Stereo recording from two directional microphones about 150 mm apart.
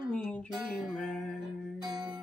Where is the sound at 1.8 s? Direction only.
30° right (ahead or behind).